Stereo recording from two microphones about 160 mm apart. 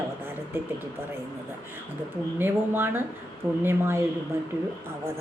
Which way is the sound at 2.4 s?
15° right (ahead or behind).